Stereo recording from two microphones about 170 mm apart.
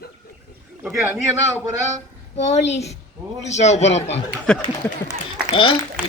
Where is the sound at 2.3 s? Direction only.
40° left (ahead or behind).